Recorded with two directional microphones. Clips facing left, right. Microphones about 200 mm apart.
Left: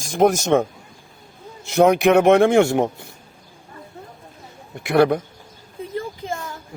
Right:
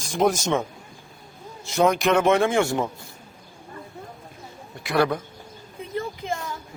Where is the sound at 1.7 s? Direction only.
60° left (ahead or behind).